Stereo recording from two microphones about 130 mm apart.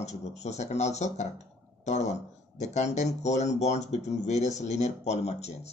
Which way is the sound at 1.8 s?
60° left (ahead or behind).